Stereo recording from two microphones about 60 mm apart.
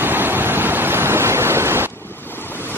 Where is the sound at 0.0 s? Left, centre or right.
Right.